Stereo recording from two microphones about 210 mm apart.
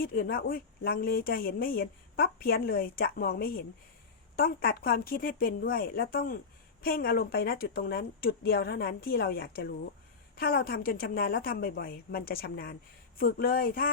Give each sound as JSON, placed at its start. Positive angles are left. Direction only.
{"t": 0.0, "sound": "speech", "side_deg": 45}